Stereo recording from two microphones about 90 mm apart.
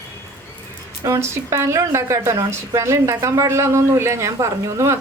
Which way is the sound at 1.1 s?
30° right (ahead or behind).